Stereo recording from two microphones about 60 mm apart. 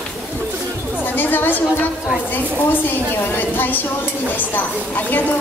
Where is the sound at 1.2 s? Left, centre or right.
Left.